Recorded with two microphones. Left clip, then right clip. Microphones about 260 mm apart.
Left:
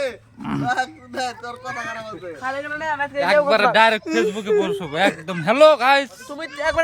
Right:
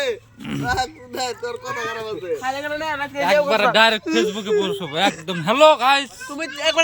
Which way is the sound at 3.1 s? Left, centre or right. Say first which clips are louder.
Left 1 dB; centre.